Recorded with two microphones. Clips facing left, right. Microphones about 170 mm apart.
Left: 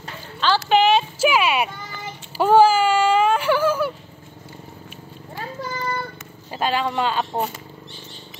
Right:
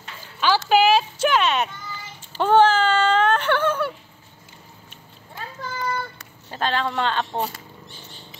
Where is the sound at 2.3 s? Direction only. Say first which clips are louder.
Left 2 dB; 10° left (ahead or behind).